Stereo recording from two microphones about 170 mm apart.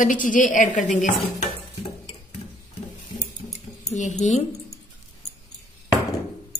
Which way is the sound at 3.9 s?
45° left (ahead or behind).